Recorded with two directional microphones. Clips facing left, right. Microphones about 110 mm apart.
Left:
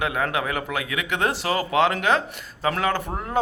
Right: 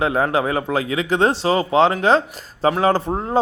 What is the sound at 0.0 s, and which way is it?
Speech, 30° right (ahead or behind).